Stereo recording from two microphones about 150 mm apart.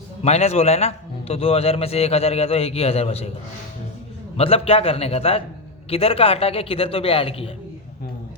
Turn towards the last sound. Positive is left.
turn(degrees=40)  # may be behind; listen again after turning